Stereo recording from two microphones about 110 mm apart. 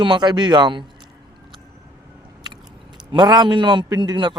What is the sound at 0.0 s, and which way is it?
Speech, 40° right (ahead or behind).